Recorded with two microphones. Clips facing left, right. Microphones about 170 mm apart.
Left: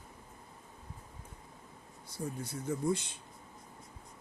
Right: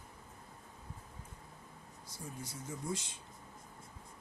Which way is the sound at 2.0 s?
60° left (ahead or behind).